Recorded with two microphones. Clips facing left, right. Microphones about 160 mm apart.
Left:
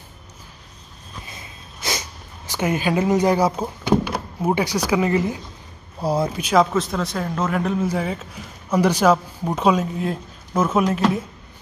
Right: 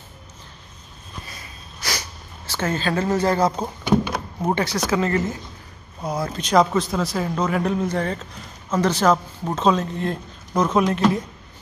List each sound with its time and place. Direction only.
1.2 s sniff: 20° left (ahead or behind)
5.9 s speech: 30° left (ahead or behind)
6.2 s a man's voice: 10° left (ahead or behind)